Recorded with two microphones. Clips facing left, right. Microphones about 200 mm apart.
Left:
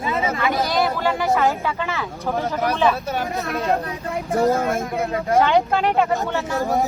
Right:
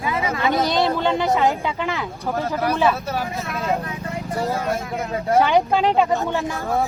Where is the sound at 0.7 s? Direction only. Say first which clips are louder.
Right 1 dB; 25° right (ahead or behind).